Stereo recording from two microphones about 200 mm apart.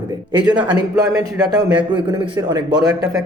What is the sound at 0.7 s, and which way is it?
A man's voice, 15° right (ahead or behind).